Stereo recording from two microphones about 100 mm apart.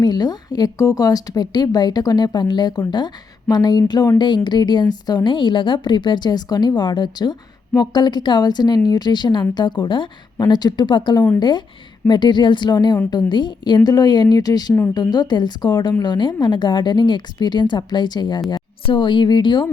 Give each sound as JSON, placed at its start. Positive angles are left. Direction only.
{"t": 0.0, "sound": "a woman's voice", "side_deg": 45}